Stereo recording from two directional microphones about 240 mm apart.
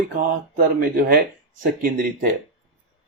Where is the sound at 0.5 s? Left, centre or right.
Right.